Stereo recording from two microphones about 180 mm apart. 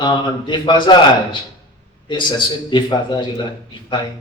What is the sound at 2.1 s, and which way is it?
Speech, 25° left (ahead or behind).